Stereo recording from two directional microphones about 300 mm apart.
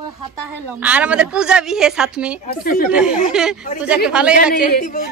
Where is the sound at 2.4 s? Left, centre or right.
Left.